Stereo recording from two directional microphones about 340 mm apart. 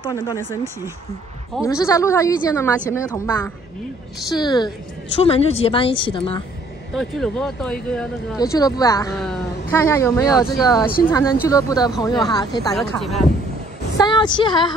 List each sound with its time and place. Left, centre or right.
0.1 s speech: centre
6.9 s speech: centre
12.7 s a woman's voice: centre
13.9 s speech: centre